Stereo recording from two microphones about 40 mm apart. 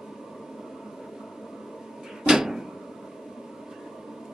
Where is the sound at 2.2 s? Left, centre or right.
Centre.